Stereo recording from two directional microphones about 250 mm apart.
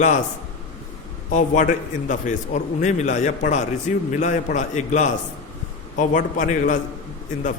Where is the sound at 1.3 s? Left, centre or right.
Left.